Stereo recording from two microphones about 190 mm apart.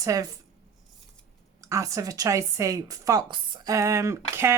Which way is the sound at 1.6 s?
15° right (ahead or behind).